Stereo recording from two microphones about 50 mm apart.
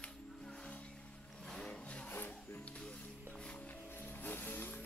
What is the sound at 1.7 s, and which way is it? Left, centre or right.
Wood, left.